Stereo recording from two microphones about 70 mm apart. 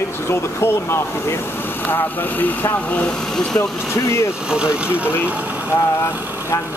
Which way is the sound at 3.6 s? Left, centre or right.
Left.